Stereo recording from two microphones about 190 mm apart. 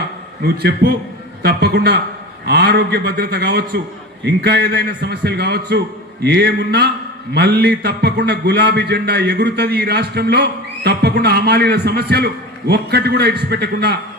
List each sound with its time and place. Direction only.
1.4 s a man's voice: 55° right (ahead or behind)